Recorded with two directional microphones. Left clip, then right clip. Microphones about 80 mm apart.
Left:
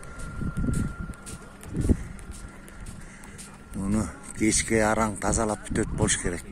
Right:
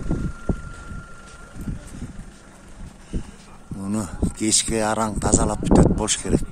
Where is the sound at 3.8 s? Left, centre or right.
Right.